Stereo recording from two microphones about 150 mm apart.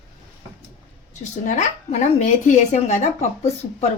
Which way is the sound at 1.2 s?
50° left (ahead or behind).